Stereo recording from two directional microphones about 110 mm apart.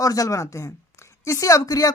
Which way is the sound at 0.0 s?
30° left (ahead or behind).